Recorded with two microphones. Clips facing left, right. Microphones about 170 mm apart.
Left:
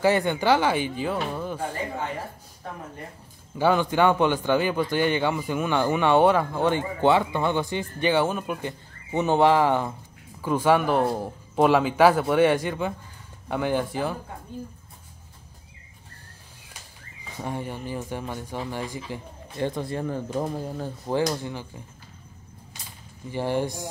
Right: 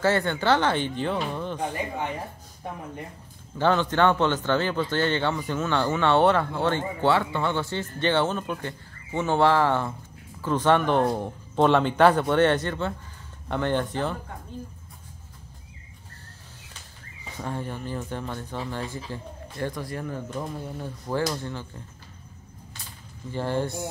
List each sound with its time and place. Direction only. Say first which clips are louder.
0.0 s a man's voice: left 2 dB; 15° left (ahead or behind)
3.5 s a man's voice: left 1 dB; 10° left (ahead or behind)
17.4 s a man's voice: left 1 dB; 15° left (ahead or behind); by 20.9 s 35° left (ahead or behind)
21.3 s a man's voice: left 2 dB; 15° left (ahead or behind)
23.3 s a man's voice: left 1 dB; 15° left (ahead or behind)